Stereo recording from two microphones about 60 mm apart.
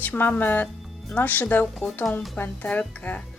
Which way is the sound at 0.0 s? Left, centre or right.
Left.